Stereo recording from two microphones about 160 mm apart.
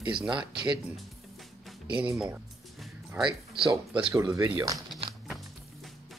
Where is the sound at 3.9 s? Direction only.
5° right (ahead or behind).